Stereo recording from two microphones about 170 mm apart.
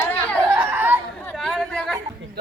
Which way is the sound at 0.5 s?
10° right (ahead or behind).